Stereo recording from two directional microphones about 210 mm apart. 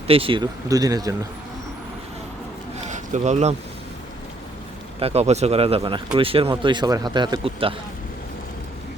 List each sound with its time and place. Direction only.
0.1 s speech: 25° right (ahead or behind)
2.9 s a sound: 35° right (ahead or behind)
4.9 s speech: 30° right (ahead or behind)